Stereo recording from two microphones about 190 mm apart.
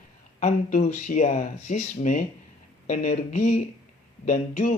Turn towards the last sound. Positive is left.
turn(degrees=40)  # may be behind; listen again after turning